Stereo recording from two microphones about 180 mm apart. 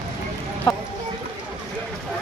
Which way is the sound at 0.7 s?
25° left (ahead or behind).